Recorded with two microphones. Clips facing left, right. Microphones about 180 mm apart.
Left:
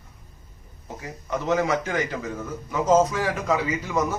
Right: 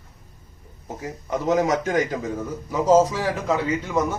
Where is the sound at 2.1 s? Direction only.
15° right (ahead or behind).